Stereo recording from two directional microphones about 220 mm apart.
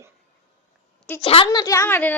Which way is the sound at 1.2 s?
25° left (ahead or behind).